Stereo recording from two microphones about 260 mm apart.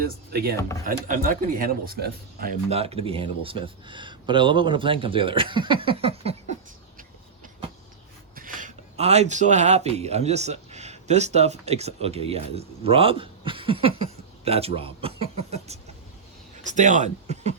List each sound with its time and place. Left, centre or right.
0.0 s speech: right
2.6 s speech: right
8.4 s speech: right